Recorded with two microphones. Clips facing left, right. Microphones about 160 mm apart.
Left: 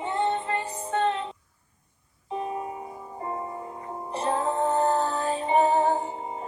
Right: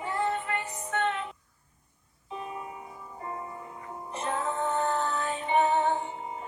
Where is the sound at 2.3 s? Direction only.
35° left (ahead or behind).